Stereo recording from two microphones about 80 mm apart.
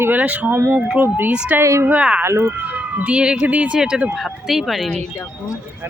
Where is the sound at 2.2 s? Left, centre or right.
Right.